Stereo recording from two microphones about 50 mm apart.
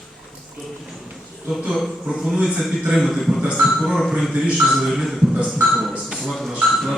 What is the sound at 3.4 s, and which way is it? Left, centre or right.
Speech, centre.